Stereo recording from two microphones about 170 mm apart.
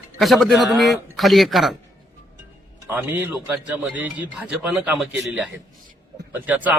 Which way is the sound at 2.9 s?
10° right (ahead or behind).